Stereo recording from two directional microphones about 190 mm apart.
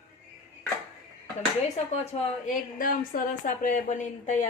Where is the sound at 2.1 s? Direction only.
40° left (ahead or behind).